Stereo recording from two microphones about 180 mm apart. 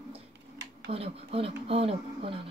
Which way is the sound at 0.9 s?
35° right (ahead or behind).